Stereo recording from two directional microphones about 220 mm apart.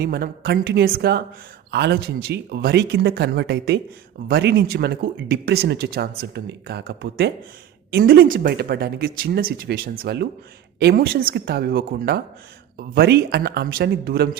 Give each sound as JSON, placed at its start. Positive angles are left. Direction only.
{"t": 0.0, "sound": "speech", "side_deg": -45}